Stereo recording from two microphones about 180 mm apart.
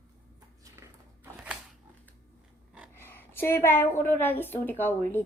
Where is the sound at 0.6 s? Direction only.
15° right (ahead or behind).